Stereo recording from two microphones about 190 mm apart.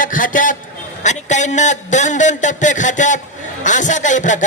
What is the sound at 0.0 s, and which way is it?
A man's voice, 45° left (ahead or behind).